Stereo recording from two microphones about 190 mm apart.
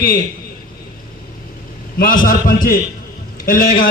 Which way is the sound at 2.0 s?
45° left (ahead or behind).